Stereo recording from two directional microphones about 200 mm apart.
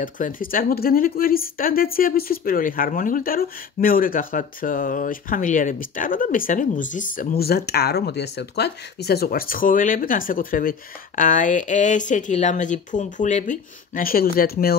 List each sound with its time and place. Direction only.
0.0 s speech: 45° left (ahead or behind)